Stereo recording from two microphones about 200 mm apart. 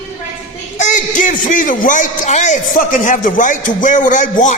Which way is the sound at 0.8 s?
40° left (ahead or behind).